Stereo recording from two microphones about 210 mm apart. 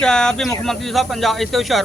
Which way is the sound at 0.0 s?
5° left (ahead or behind).